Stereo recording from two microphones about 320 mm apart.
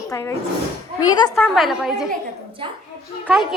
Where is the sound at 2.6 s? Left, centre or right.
Centre.